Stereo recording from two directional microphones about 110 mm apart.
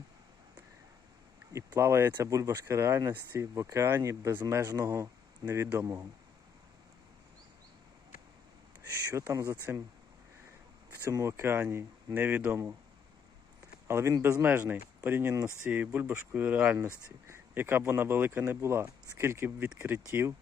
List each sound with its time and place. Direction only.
1.5 s speech: 25° right (ahead or behind)
9.0 s speech: 25° right (ahead or behind)
11.0 s speech: 25° right (ahead or behind)
13.8 s speech: 25° right (ahead or behind)
15.6 s speech: 15° right (ahead or behind)
20.1 s speech: 25° right (ahead or behind)